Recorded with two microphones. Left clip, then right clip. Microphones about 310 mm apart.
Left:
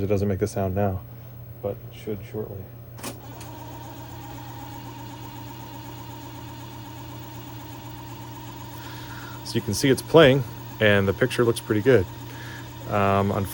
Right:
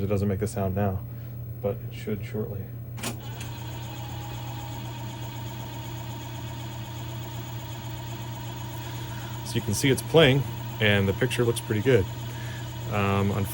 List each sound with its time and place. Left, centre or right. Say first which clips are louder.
0.0 s speech: left 4 dB; left
9.5 s speech: left 3 dB; centre